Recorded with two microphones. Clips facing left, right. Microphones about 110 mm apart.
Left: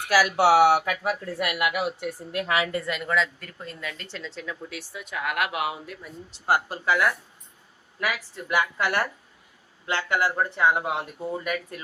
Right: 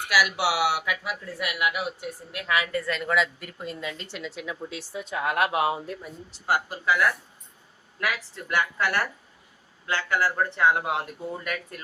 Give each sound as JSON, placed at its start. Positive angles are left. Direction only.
{"t": 0.1, "sound": "speech", "side_deg": 40}
{"t": 2.3, "sound": "a woman's voice", "side_deg": 30}
{"t": 3.0, "sound": "speech", "side_deg": -5}
{"t": 3.6, "sound": "speech", "side_deg": -20}
{"t": 4.7, "sound": "speech", "side_deg": -25}
{"t": 6.5, "sound": "speech", "side_deg": 35}
{"t": 8.0, "sound": "a woman's voice", "side_deg": 5}
{"t": 10.6, "sound": "speech", "side_deg": 5}